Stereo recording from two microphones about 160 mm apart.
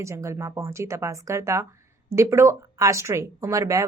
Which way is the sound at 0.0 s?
20° right (ahead or behind).